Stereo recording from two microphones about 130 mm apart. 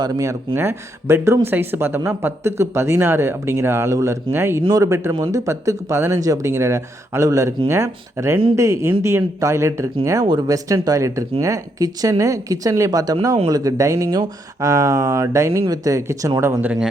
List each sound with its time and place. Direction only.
0.0 s speech: 25° right (ahead or behind)